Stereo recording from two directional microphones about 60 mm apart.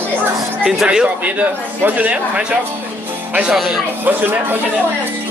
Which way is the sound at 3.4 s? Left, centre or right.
Centre.